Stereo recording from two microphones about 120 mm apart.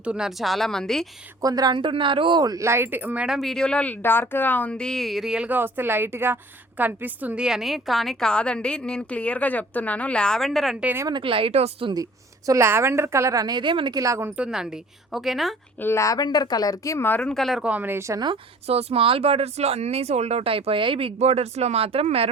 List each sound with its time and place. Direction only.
0.0 s speech: 5° right (ahead or behind)
1.4 s speech: 30° right (ahead or behind); by 10.8 s centre (ahead or behind)
11.2 s speech: 45° right (ahead or behind)
12.5 s a woman's voice: 20° right (ahead or behind)
14.3 s speech: 5° right (ahead or behind)
15.8 s speech: 25° left (ahead or behind); by 17.7 s centre (ahead or behind)
17.7 s a woman's voice: 15° right (ahead or behind)
18.7 s speech: 55° right (ahead or behind)